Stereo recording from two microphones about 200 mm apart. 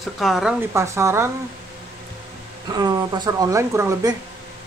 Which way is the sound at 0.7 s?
15° right (ahead or behind).